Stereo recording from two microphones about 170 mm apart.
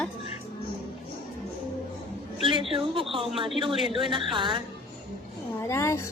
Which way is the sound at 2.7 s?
30° right (ahead or behind).